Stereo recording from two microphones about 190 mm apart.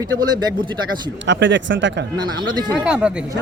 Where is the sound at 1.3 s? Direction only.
75° right (ahead or behind).